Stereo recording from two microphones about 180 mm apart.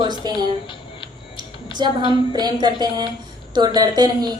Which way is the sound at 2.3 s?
25° right (ahead or behind).